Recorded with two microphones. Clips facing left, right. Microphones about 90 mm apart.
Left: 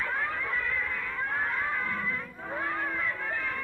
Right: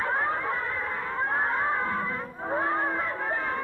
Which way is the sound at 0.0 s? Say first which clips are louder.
Right 5 dB; 35° right (ahead or behind).